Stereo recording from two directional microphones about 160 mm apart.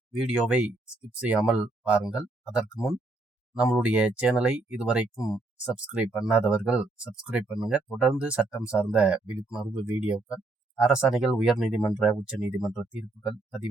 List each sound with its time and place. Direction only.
0.1 s speech: 5° right (ahead or behind)
3.6 s speech: 5° right (ahead or behind)
5.1 s speech: 20° left (ahead or behind)
5.6 s speech: 5° right (ahead or behind)